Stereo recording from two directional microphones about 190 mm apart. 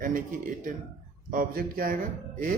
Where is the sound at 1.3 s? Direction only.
45° right (ahead or behind).